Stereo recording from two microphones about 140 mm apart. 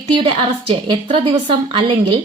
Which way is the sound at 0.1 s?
40° right (ahead or behind).